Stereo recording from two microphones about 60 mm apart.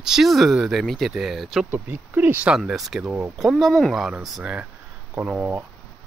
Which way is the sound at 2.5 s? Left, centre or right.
Centre.